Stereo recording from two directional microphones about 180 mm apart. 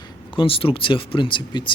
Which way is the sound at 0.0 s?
30° left (ahead or behind).